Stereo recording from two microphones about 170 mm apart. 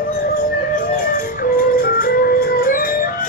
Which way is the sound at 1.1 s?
55° left (ahead or behind).